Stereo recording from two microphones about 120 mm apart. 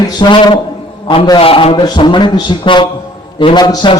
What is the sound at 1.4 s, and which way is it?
Speech, 50° left (ahead or behind).